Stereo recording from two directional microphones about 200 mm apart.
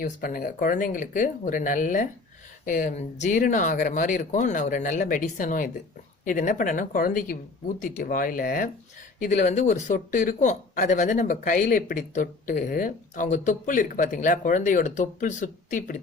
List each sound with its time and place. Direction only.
0.0 s speech: 45° left (ahead or behind)